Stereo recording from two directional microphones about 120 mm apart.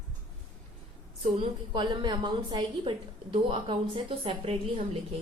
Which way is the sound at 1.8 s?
40° right (ahead or behind).